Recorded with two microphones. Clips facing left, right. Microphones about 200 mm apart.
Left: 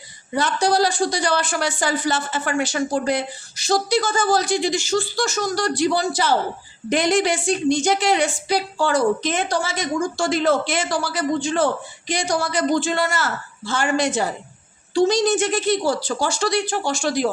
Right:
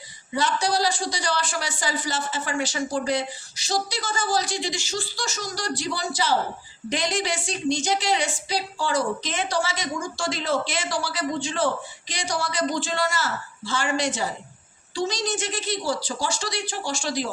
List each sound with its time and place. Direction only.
0.3 s a man's voice: 55° left (ahead or behind)